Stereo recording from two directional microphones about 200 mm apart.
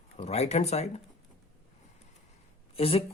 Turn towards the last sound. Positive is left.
turn(degrees=30)  # may be behind; listen again after turning